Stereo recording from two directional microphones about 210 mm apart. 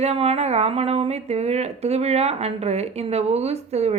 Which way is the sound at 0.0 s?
30° right (ahead or behind).